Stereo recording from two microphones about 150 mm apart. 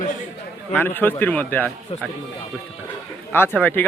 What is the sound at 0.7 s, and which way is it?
Speech, 15° left (ahead or behind).